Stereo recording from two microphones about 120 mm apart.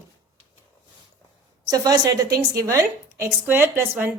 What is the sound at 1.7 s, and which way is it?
A woman's voice, 30° right (ahead or behind).